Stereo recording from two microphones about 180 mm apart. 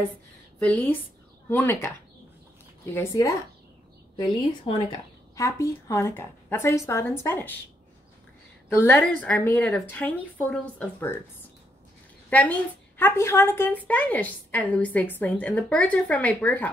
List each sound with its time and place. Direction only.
0.6 s a woman's voice: 5° left (ahead or behind)
8.7 s a woman's voice: 10° left (ahead or behind)
12.3 s a woman's voice: 10° left (ahead or behind)